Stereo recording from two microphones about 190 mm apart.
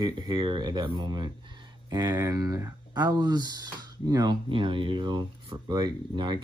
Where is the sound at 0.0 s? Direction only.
20° right (ahead or behind).